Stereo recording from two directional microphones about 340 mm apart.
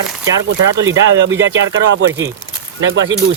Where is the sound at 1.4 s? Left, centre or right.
Right.